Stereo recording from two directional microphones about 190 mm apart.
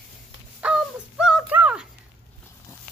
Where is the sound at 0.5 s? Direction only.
5° right (ahead or behind).